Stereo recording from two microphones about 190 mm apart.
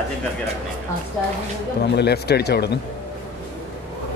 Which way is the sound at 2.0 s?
60° left (ahead or behind).